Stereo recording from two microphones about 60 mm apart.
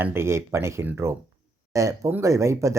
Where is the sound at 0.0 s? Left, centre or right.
Right.